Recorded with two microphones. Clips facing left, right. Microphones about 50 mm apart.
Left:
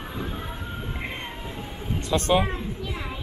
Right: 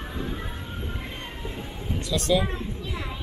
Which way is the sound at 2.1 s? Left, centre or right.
Left.